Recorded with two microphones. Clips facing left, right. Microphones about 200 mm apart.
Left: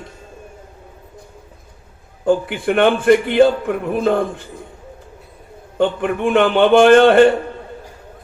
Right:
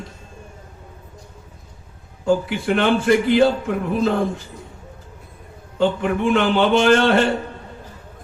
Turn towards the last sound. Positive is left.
turn(degrees=55)  # may be behind; listen again after turning